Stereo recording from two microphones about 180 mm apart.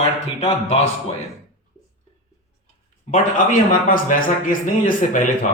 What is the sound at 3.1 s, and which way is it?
A man's voice, 50° left (ahead or behind).